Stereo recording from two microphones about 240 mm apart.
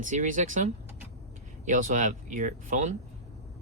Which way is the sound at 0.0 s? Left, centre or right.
Right.